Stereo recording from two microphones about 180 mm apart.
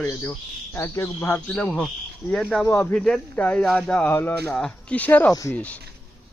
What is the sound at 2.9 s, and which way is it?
Speech, 5° left (ahead or behind).